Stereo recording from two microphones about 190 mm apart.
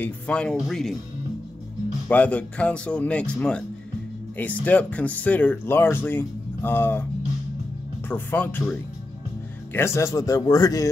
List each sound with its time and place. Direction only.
0.0 s speech: 5° left (ahead or behind)
2.0 s speech: 10° left (ahead or behind)
4.6 s speech: 10° left (ahead or behind)
8.1 s speech: 10° left (ahead or behind)
9.8 s speech: 15° left (ahead or behind)